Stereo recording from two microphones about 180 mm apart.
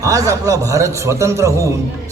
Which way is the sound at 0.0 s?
20° right (ahead or behind).